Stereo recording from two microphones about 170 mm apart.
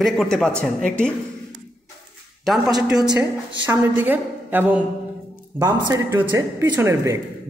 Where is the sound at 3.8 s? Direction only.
10° right (ahead or behind).